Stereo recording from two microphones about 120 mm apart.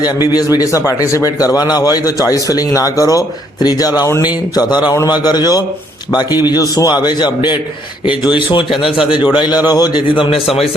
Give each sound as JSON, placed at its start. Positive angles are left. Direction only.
{"t": 0.3, "sound": "a man's voice", "side_deg": 30}
{"t": 9.6, "sound": "speech", "side_deg": 35}